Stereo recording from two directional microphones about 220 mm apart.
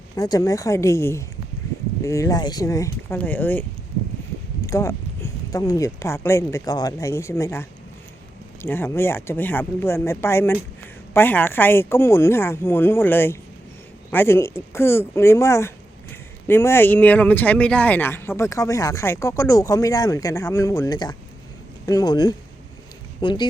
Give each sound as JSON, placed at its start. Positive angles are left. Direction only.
{"t": 0.2, "sound": "speech", "side_deg": 15}